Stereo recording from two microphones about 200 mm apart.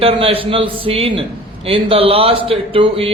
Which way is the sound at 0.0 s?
30° right (ahead or behind).